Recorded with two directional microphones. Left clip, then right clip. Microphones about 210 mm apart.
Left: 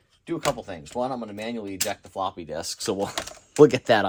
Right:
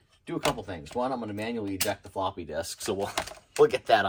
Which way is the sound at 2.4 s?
35° left (ahead or behind).